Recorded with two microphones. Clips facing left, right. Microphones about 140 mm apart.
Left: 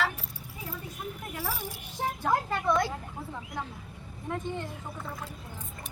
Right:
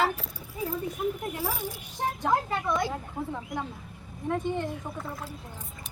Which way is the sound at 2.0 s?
5° left (ahead or behind).